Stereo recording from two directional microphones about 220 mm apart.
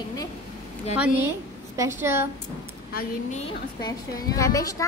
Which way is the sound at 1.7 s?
10° right (ahead or behind).